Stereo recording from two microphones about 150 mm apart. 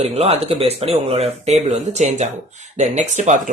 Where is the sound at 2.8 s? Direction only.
50° right (ahead or behind).